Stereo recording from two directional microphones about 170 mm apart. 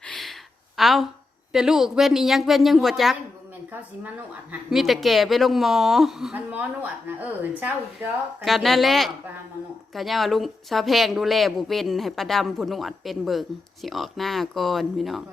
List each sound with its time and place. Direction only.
0.0 s a sound: 5° left (ahead or behind)
0.8 s speech: centre (ahead or behind)
4.7 s speech: centre (ahead or behind)
8.4 s speech: centre (ahead or behind)